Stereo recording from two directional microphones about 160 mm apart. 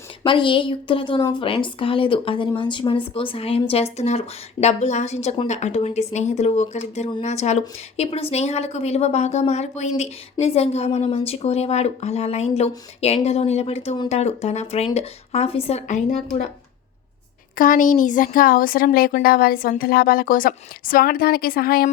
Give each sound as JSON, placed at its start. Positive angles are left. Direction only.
{"t": 0.2, "sound": "speech", "side_deg": 30}
{"t": 17.6, "sound": "a woman's voice", "side_deg": 55}